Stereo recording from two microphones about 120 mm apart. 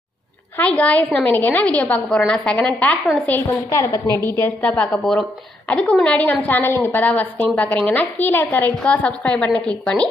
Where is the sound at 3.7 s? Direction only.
25° left (ahead or behind).